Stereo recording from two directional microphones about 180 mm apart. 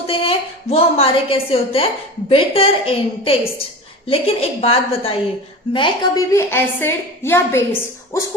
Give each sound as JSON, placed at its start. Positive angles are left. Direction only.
{"t": 0.1, "sound": "a woman's voice", "side_deg": 30}